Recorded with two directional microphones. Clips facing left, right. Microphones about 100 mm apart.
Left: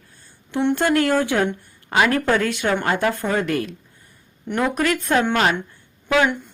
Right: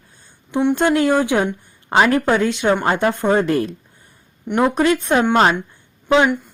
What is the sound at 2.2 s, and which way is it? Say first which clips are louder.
A woman's voice: right 3 dB; 20° right (ahead or behind).